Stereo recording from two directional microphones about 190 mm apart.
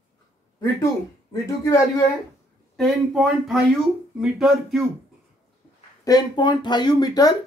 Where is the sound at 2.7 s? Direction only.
Centre (ahead or behind).